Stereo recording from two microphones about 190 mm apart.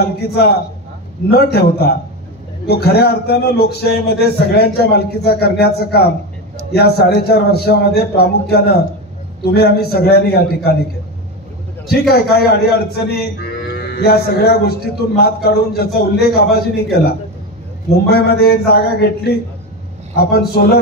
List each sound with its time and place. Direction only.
0.3 s a man's voice: 55° left (ahead or behind)
12.4 s a man's voice: 55° left (ahead or behind)